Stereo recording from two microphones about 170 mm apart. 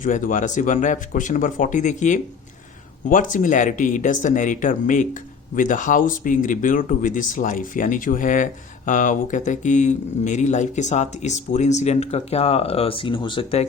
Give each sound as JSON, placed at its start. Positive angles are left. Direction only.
{"t": 0.0, "sound": "speech", "side_deg": 50}